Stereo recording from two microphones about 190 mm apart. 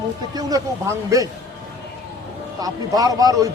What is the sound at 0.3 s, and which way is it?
Speech, 15° right (ahead or behind).